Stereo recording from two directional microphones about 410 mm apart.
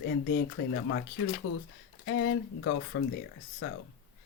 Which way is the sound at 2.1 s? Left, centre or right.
Left.